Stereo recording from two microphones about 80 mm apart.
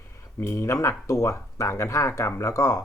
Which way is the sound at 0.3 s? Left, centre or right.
Left.